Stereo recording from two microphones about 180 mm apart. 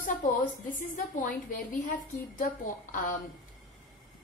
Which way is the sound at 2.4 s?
45° left (ahead or behind).